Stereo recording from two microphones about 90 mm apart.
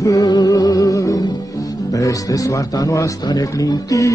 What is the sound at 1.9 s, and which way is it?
A man's voice, 40° left (ahead or behind).